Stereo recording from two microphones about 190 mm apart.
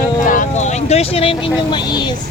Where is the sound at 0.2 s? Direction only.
45° left (ahead or behind); by 2.1 s 25° left (ahead or behind).